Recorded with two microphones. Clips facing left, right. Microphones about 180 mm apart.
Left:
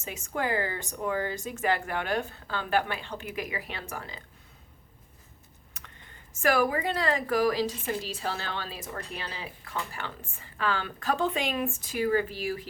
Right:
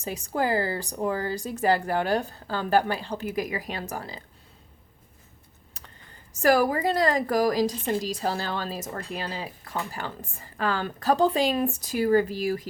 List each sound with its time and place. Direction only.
0.0 s speech: 35° right (ahead or behind)
5.7 s a sound: 35° right (ahead or behind)
6.3 s speech: 40° right (ahead or behind)